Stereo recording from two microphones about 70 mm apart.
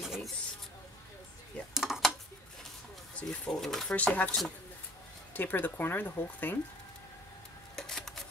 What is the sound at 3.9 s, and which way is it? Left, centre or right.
Speech, left.